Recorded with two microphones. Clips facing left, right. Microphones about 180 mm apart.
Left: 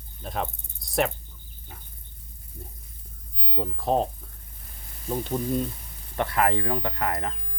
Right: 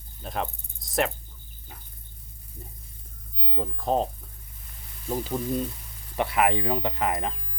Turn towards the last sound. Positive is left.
turn(degrees=-20)  # may be behind; listen again after turning